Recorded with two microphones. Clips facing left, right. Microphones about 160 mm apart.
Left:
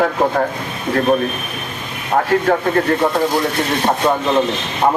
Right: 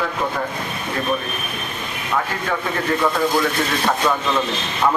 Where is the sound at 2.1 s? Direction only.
50° left (ahead or behind).